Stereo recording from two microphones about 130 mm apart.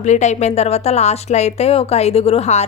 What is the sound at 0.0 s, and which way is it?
A woman's voice, 65° left (ahead or behind).